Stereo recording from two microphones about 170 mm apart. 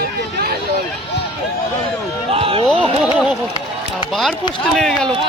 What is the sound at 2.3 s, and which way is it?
Speech, 35° right (ahead or behind).